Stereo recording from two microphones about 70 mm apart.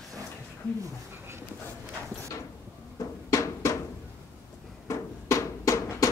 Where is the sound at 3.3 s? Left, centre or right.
Left.